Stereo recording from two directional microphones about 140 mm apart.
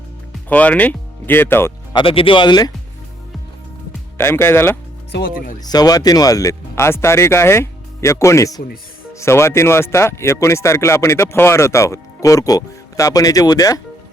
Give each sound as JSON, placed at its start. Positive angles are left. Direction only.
{"t": 0.4, "sound": "speech", "side_deg": 10}
{"t": 1.9, "sound": "speech", "side_deg": 35}
{"t": 4.2, "sound": "speech", "side_deg": 15}
{"t": 5.5, "sound": "speech", "side_deg": 30}